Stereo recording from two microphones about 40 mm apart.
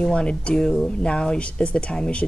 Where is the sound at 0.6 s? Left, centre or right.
Centre.